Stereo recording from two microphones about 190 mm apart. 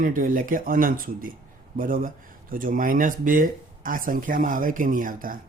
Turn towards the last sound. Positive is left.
turn(degrees=-45)  # may be behind; listen again after turning